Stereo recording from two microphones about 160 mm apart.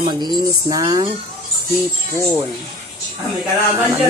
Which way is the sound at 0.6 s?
25° right (ahead or behind).